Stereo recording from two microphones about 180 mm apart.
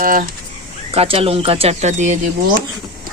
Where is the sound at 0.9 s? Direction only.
30° right (ahead or behind).